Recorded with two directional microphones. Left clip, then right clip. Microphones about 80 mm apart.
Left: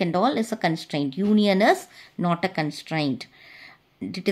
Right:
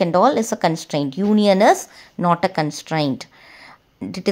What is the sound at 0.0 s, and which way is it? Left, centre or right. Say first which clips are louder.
A woman's voice: right 7 dB; right.